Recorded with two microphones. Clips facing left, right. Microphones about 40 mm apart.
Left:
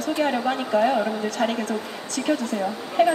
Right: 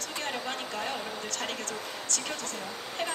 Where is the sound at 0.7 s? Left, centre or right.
Left.